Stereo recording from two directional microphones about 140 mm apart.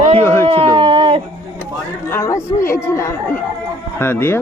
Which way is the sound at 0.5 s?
40° right (ahead or behind).